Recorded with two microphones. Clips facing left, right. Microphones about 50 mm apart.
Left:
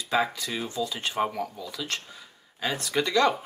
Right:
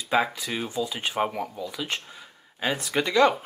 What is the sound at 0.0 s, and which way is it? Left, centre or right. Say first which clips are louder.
Speech: right 2 dB; centre.